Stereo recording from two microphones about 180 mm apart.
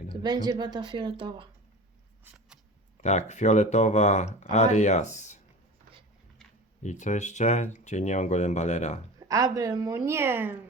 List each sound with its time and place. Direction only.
0.1 s speech: 20° right (ahead or behind)
3.0 s speech: 40° left (ahead or behind)
6.8 s speech: 40° left (ahead or behind)
9.1 s speech: 20° right (ahead or behind)